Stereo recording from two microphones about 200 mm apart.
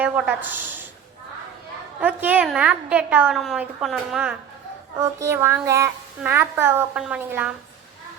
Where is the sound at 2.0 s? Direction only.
10° right (ahead or behind).